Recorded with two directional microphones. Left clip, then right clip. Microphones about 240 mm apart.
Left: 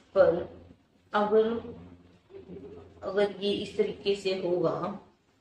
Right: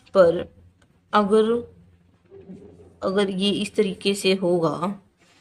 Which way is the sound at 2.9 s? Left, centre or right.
Right.